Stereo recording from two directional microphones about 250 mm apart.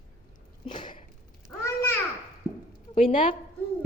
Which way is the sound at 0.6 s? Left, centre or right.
Left.